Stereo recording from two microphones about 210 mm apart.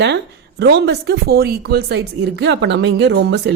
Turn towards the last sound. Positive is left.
turn(degrees=-60)  # may be behind; listen again after turning